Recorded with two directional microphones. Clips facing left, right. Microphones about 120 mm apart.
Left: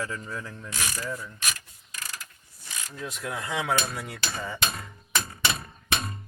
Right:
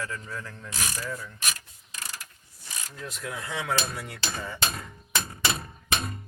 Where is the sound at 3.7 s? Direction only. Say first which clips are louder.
Left 2 dB; 5° left (ahead or behind).